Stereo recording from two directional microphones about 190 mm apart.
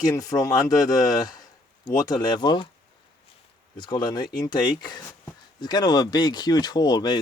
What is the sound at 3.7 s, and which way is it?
Speech, 25° left (ahead or behind).